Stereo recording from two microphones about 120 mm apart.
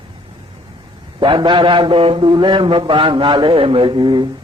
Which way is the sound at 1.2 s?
40° right (ahead or behind).